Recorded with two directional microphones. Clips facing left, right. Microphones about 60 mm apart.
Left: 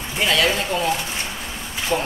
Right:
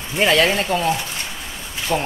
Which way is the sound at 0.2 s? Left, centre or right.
Right.